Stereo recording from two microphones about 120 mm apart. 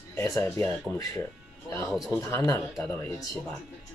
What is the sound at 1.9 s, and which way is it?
Speech, centre (ahead or behind).